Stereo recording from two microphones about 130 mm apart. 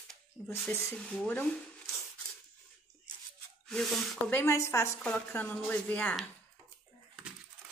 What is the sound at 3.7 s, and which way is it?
Speech, centre (ahead or behind).